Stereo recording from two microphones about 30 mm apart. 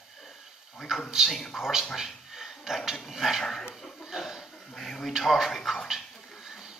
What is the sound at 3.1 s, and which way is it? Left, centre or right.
Speech, centre.